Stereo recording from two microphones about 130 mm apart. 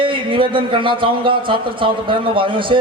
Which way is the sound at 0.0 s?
40° right (ahead or behind).